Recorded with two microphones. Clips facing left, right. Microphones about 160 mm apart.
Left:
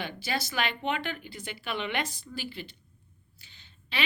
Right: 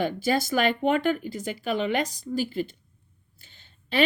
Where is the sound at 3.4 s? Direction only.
50° right (ahead or behind).